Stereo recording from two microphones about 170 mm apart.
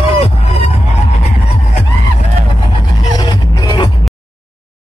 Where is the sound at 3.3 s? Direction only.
25° left (ahead or behind).